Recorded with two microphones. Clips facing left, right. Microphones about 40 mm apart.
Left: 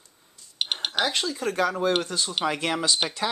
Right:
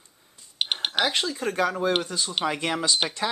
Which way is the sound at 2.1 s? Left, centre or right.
Centre.